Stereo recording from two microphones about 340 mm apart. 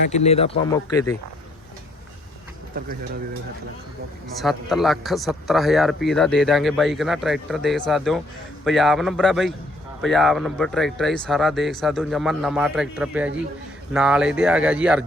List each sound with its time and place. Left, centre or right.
0.1 s speech: centre
4.4 s speech: centre